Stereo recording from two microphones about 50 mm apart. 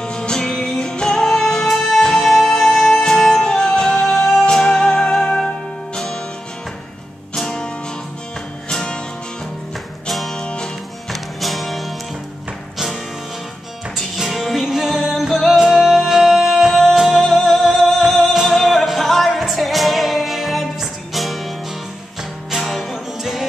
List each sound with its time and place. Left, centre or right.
0.0 s music: centre
7.3 s music: centre
10.0 s music: centre
10.4 s music: centre
11.1 s music: centre
13.9 s music: centre